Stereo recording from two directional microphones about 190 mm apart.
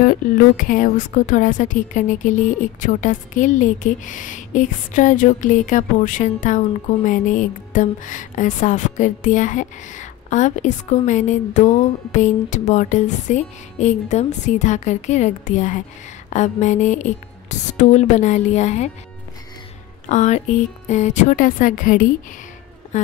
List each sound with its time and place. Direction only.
0.6 s a woman's voice: 45° left (ahead or behind)
20.1 s speech: 40° left (ahead or behind)
22.9 s a sound: 40° left (ahead or behind)